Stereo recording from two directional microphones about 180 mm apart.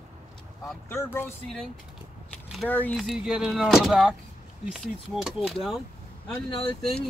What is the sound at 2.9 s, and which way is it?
Speech, centre (ahead or behind).